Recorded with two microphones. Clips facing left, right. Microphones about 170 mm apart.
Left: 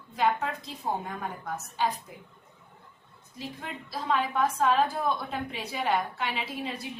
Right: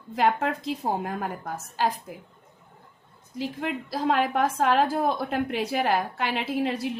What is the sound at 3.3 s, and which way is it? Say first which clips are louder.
A woman's voice: right 9 dB; 85° right.